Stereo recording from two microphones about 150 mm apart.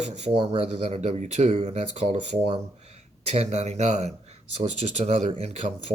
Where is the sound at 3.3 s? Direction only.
45° right (ahead or behind).